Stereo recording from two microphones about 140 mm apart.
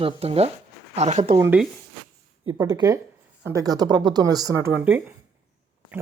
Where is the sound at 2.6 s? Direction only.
25° right (ahead or behind).